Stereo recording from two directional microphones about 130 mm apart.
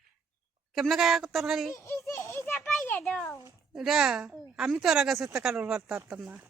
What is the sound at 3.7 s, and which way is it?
A woman's voice, 5° right (ahead or behind).